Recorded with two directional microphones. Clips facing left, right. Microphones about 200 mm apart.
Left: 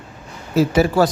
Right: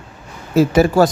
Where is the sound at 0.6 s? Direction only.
50° right (ahead or behind).